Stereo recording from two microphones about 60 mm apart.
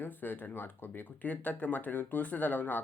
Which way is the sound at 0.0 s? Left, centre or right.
Left.